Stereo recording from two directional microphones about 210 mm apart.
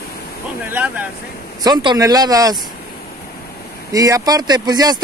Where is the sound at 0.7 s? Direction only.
5° right (ahead or behind).